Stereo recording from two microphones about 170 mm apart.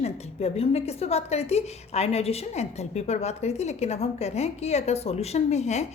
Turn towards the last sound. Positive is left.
turn(degrees=40)  # may be behind; listen again after turning